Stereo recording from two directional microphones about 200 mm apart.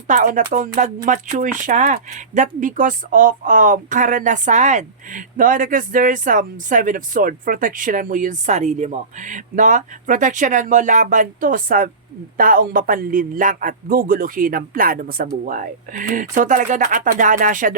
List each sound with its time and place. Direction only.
0.1 s a man's voice: 40° right (ahead or behind)